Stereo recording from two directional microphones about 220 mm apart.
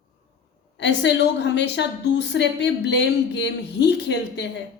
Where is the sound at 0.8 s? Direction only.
50° left (ahead or behind).